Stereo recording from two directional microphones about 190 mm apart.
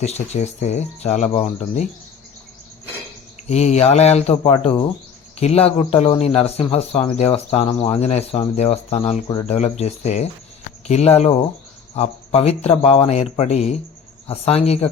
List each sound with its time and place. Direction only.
0.0 s speech: 35° left (ahead or behind)
3.4 s speech: 35° left (ahead or behind)